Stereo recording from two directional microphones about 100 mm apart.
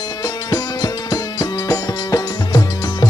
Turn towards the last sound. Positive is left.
turn(degrees=40)  # may be behind; listen again after turning